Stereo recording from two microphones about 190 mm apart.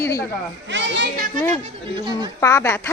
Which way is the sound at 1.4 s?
10° left (ahead or behind).